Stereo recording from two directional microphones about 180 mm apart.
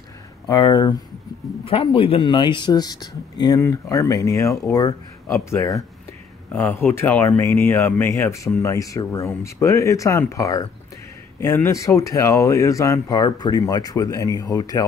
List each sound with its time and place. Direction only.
0.5 s speech: 20° left (ahead or behind)